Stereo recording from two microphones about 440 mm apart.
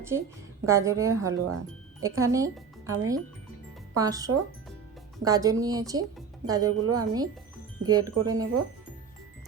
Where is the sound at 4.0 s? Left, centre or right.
Centre.